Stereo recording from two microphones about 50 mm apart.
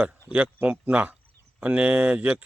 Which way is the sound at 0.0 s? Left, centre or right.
Right.